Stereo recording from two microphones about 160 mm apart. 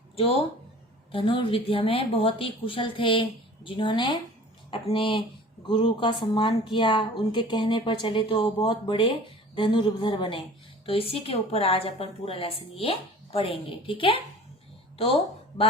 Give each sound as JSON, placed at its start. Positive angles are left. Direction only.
{"t": 0.2, "sound": "a woman's voice", "side_deg": 35}